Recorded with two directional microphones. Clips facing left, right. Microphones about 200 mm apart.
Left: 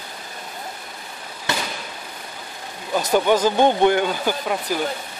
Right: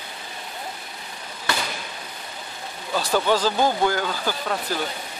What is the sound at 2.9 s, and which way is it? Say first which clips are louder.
Speech: left 3 dB; 20° left (ahead or behind).